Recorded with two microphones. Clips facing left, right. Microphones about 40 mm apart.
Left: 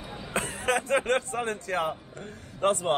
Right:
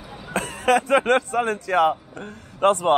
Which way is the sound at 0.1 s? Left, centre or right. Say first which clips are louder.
Right 4 dB; right.